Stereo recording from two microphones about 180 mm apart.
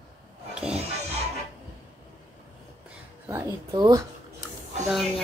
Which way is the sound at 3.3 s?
20° right (ahead or behind).